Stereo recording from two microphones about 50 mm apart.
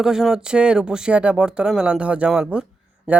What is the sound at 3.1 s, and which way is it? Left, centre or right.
Mantra, right.